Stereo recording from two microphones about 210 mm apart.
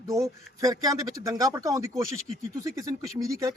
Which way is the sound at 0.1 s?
15° right (ahead or behind).